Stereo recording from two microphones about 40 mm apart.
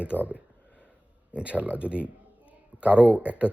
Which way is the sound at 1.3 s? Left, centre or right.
Right.